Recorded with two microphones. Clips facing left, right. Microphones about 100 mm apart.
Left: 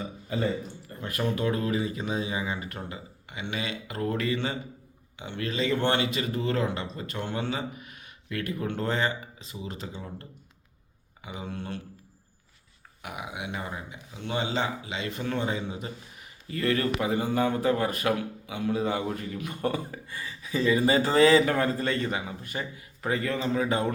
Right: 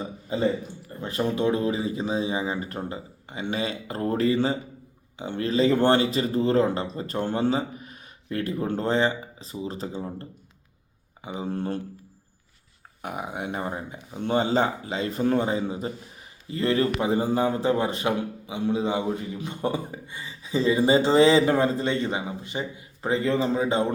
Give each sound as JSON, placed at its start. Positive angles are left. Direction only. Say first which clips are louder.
{"t": 0.3, "sound": "a man's voice", "louder": "right 4 dB", "side_deg": -25}
{"t": 13.0, "sound": "a man's voice", "louder": "right 5 dB", "side_deg": -40}